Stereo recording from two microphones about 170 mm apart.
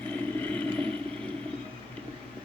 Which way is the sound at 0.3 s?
10° left (ahead or behind).